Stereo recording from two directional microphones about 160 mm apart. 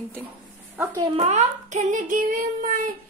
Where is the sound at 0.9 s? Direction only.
35° right (ahead or behind).